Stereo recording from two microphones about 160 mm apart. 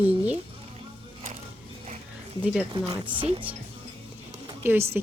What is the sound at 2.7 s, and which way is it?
Speech, 30° right (ahead or behind).